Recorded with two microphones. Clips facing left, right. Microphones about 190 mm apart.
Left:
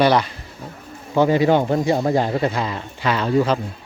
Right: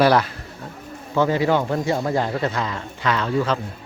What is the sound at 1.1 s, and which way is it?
Speech, 20° left (ahead or behind).